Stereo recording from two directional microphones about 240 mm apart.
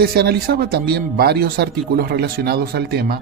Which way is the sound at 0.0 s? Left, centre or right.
Right.